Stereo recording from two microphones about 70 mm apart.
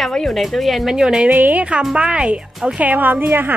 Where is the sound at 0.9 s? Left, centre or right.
Centre.